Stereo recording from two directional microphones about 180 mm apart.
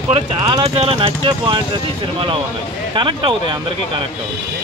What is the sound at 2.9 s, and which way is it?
Speech, 25° right (ahead or behind).